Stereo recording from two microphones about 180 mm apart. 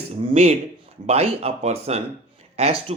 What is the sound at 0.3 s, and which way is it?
Speech, 35° right (ahead or behind).